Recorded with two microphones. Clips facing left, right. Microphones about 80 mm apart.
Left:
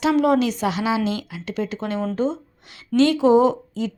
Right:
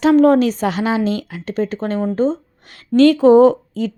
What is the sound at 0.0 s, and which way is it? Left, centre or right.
A woman's voice, right.